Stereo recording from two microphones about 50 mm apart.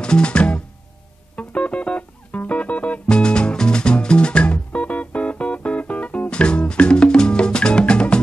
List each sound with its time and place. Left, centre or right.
0.0 s music: centre